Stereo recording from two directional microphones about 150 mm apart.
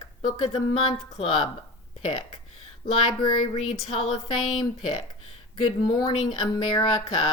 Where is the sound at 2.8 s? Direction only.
35° left (ahead or behind).